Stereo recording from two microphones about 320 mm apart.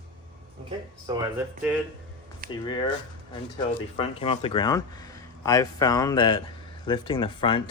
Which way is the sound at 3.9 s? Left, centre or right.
Centre.